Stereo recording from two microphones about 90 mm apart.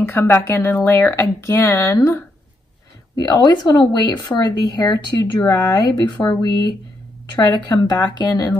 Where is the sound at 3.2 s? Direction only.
50° left (ahead or behind).